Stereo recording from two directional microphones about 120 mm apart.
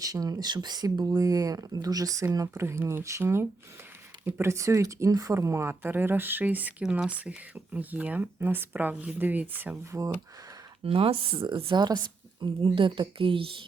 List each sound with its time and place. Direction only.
0.0 s speech: 30° right (ahead or behind)
10.8 s a woman's voice: 50° right (ahead or behind)